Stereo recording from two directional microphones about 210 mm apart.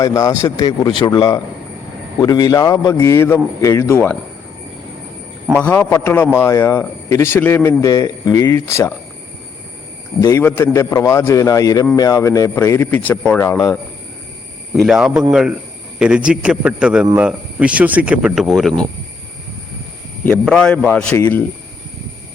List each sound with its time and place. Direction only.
0.0 s speech: 15° left (ahead or behind)
5.5 s speech: 10° left (ahead or behind)
10.2 s speech: 15° left (ahead or behind)
14.7 s speech: centre (ahead or behind)
20.4 s speech: 5° left (ahead or behind)